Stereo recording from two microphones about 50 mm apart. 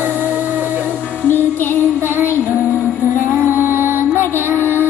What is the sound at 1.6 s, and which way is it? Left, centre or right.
Music, left.